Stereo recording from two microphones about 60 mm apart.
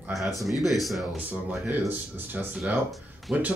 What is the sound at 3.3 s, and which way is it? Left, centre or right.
Speech, right.